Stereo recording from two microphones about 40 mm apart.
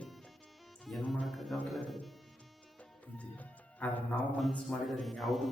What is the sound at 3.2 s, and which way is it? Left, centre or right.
Speech, left.